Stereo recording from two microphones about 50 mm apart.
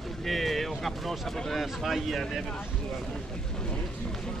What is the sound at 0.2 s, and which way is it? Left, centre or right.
Speech, centre.